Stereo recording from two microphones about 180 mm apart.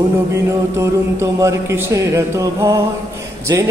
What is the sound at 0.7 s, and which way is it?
A man's voice, 15° right (ahead or behind).